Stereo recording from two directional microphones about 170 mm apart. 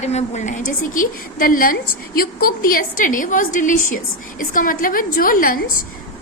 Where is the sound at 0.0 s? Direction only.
40° left (ahead or behind).